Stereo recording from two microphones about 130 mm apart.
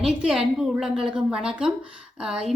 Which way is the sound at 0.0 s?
5° right (ahead or behind).